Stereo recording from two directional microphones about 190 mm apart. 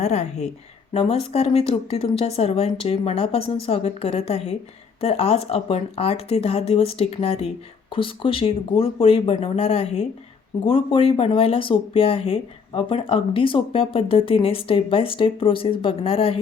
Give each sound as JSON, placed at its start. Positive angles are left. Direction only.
{"t": 0.0, "sound": "speech", "side_deg": 35}